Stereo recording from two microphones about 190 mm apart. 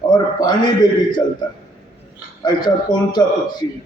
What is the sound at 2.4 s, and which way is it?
A man's voice, 20° left (ahead or behind).